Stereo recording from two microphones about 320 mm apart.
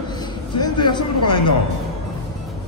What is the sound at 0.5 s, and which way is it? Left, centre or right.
Speech, centre.